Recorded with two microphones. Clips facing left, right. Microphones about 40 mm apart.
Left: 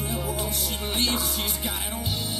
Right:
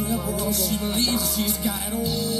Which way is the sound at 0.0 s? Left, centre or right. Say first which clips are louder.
Right 4 dB; left.